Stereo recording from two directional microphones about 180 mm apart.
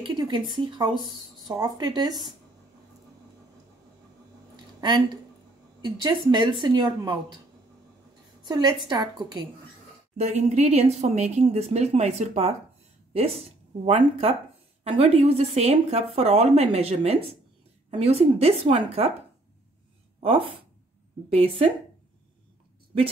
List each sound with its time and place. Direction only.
0.0 s speech: 25° right (ahead or behind)
4.7 s speech: 25° right (ahead or behind)
8.5 s speech: 25° right (ahead or behind)
10.1 s a woman's voice: 40° right (ahead or behind)
21.3 s speech: 35° right (ahead or behind)